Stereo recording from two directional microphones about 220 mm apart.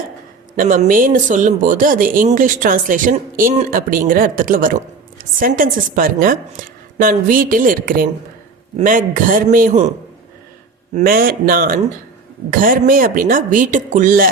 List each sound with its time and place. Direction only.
0.5 s speech: 35° right (ahead or behind)
10.9 s speech: 40° right (ahead or behind)